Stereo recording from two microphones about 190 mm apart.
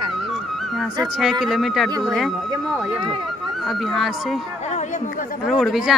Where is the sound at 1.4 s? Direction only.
Centre (ahead or behind).